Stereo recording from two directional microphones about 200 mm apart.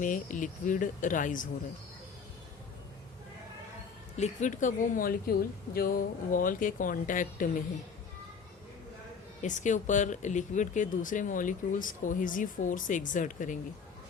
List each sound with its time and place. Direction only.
0.0 s speech: 40° left (ahead or behind)
4.2 s speech: 35° left (ahead or behind)
9.4 s speech: 40° left (ahead or behind)